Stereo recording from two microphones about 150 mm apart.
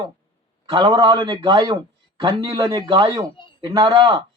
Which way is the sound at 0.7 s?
30° right (ahead or behind).